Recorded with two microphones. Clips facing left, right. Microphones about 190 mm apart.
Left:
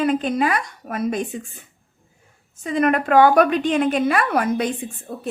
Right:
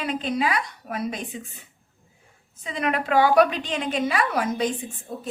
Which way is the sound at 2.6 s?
50° left (ahead or behind).